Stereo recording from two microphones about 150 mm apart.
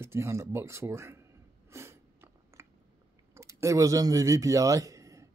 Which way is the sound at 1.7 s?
15° right (ahead or behind).